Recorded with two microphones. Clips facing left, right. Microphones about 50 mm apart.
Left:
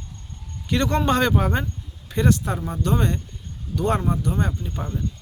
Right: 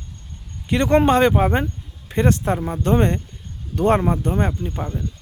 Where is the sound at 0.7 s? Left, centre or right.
Right.